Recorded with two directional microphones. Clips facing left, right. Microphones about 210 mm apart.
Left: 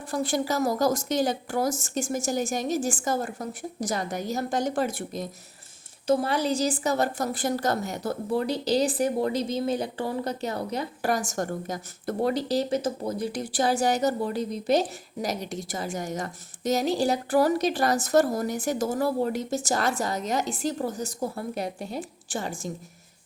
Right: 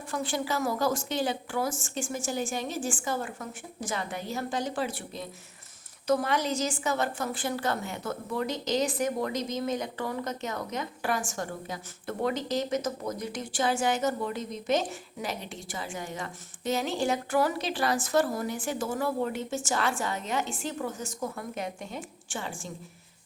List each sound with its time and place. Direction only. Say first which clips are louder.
0.1 s a woman's voice: left 4 dB; 40° left (ahead or behind)
6.1 s a woman's voice: left 3 dB; 30° left (ahead or behind)